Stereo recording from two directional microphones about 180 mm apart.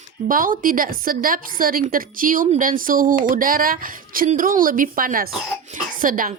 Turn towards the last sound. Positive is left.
turn(degrees=-50)  # may be behind; listen again after turning